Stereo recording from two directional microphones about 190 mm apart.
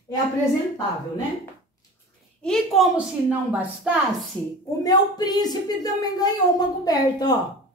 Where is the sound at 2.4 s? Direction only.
Centre (ahead or behind).